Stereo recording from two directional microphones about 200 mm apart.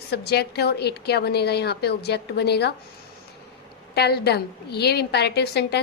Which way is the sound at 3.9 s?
55° left (ahead or behind).